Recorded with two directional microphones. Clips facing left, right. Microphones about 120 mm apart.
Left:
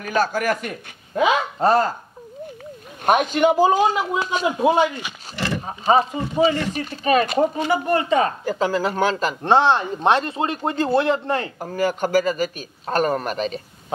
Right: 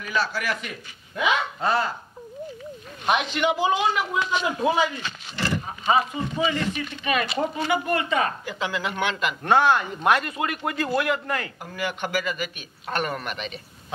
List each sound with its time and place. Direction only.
0.0 s a man's voice: 45° left (ahead or behind)
3.1 s a man's voice: 45° left (ahead or behind)
4.5 s speech: 20° left (ahead or behind)
4.8 s a sound: 15° left (ahead or behind)
5.7 s a man's voice: 35° left (ahead or behind)
11.6 s a man's voice: 40° left (ahead or behind)